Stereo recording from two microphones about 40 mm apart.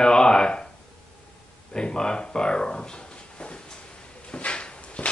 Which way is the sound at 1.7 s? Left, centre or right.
Centre.